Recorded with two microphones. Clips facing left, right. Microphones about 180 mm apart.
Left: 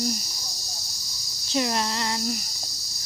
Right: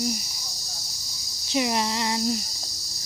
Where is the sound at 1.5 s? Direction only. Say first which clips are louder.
Right 1 dB; 15° right (ahead or behind).